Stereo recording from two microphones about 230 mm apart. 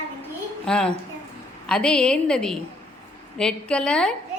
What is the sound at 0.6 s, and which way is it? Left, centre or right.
A woman's voice, centre.